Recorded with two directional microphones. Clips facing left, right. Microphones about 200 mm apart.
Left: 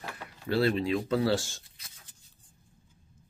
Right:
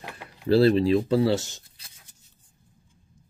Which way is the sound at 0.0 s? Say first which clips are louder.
Right 1 dB; 15° right (ahead or behind).